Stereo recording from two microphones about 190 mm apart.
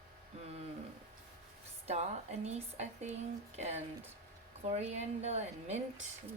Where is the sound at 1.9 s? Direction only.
35° right (ahead or behind).